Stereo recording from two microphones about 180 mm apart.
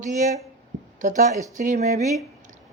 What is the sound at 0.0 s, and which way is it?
Speech, 45° right (ahead or behind).